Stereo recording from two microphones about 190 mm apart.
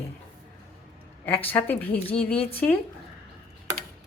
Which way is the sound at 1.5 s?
10° left (ahead or behind).